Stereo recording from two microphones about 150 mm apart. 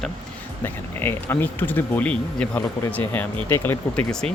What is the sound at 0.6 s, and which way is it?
Speech, 15° left (ahead or behind).